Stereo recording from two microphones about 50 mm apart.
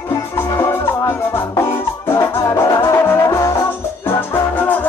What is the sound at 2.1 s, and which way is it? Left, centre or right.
Music, left.